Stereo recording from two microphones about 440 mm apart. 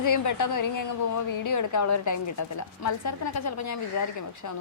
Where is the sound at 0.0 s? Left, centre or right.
Left.